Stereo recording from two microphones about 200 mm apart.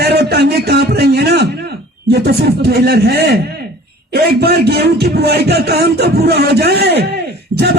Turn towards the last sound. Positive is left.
turn(degrees=-55)  # may be behind; listen again after turning